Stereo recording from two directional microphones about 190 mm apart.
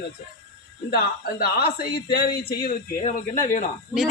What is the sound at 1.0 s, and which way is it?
A man's voice, 55° left (ahead or behind).